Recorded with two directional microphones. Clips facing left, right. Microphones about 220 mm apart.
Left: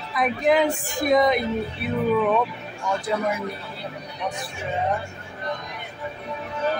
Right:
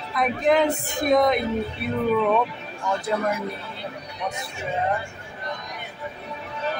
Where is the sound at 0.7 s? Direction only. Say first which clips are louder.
Even; 20° right (ahead or behind).